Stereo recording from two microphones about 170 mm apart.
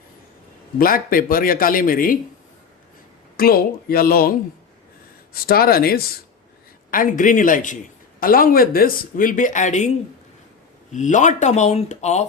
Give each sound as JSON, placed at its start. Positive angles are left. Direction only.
{"t": 0.8, "sound": "speech", "side_deg": 55}
{"t": 3.3, "sound": "speech", "side_deg": 60}
{"t": 6.9, "sound": "speech", "side_deg": 50}
{"t": 10.9, "sound": "speech", "side_deg": 45}